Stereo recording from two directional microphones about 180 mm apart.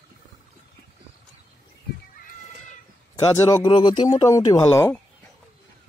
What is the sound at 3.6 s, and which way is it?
Speech, 25° left (ahead or behind).